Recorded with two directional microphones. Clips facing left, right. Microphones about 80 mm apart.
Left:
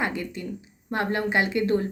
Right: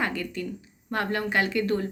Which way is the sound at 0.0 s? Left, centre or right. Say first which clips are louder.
Even; left.